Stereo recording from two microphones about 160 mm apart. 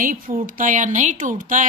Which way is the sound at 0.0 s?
60° right (ahead or behind).